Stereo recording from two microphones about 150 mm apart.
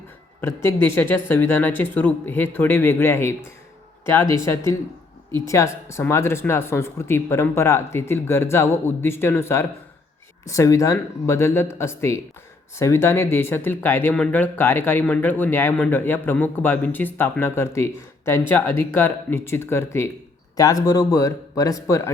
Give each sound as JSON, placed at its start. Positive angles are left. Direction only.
{"t": 0.4, "sound": "speech", "side_deg": 20}